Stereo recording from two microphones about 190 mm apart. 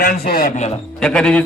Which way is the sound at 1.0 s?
5° left (ahead or behind).